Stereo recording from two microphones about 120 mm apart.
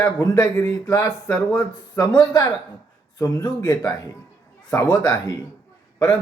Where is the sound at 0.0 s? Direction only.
30° left (ahead or behind).